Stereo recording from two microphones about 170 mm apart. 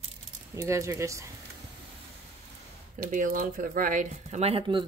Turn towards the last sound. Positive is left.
turn(degrees=-30)  # may be behind; listen again after turning